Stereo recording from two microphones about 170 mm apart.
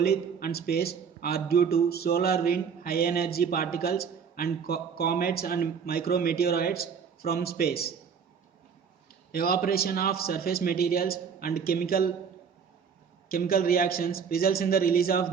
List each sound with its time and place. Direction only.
0.0 s a man's voice: 65° left (ahead or behind)
9.3 s a man's voice: 60° left (ahead or behind)
13.2 s a man's voice: 60° left (ahead or behind)